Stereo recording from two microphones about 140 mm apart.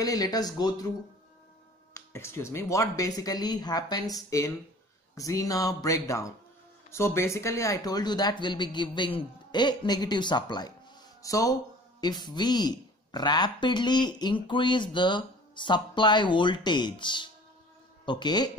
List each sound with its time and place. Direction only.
0.0 s speech: 25° left (ahead or behind)
2.0 s speech: 20° left (ahead or behind)